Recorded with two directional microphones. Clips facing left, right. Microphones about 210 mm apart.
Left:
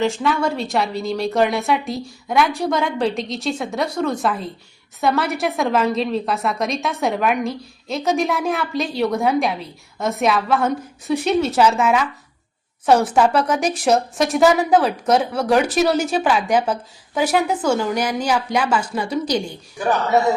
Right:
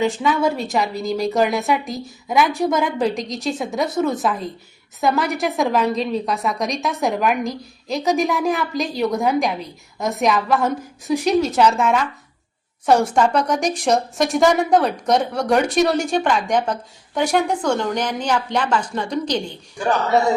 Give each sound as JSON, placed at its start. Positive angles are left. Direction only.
{"t": 0.0, "sound": "a woman's voice", "side_deg": 0}